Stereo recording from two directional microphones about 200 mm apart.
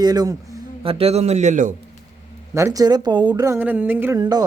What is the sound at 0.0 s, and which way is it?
A man's voice, 20° right (ahead or behind).